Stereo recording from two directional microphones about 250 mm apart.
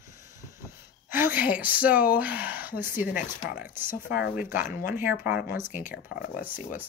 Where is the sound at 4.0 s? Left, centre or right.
Left.